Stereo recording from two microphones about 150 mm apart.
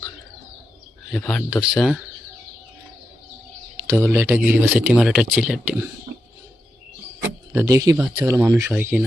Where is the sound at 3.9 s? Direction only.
15° right (ahead or behind).